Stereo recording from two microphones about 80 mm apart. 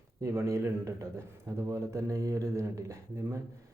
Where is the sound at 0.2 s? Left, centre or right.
Right.